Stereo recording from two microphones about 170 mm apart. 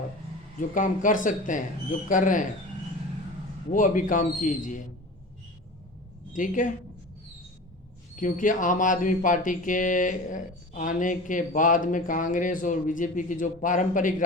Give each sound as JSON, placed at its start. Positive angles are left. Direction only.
{"t": 0.7, "sound": "speech", "side_deg": 50}
{"t": 3.7, "sound": "speech", "side_deg": 50}
{"t": 6.3, "sound": "speech", "side_deg": 50}
{"t": 8.1, "sound": "speech", "side_deg": 50}